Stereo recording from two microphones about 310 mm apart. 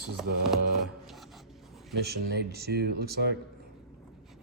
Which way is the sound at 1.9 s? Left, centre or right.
Right.